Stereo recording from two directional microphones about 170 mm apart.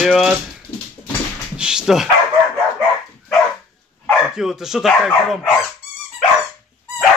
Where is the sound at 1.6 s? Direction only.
5° right (ahead or behind).